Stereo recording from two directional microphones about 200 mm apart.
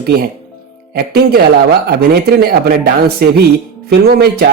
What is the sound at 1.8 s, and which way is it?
A man's voice, 55° right (ahead or behind).